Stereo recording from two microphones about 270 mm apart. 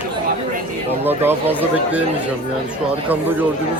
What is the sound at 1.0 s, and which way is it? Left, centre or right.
Speech, centre.